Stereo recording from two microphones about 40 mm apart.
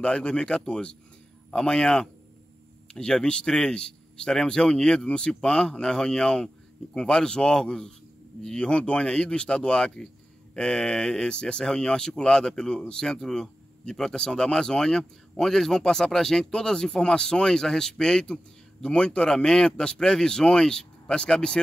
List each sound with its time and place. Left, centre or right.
0.0 s a man's voice: left
8.6 s a man's voice: left